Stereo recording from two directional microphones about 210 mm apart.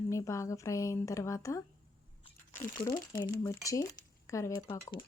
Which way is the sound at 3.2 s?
15° left (ahead or behind).